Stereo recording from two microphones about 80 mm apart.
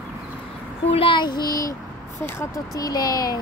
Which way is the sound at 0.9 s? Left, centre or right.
Left.